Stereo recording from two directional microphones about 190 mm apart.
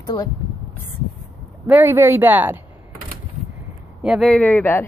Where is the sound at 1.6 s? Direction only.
10° right (ahead or behind).